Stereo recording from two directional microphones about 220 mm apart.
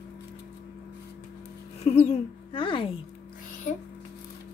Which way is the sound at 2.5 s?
25° left (ahead or behind).